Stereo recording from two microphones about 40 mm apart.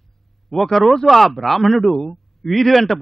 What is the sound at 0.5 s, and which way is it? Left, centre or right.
Speech, centre.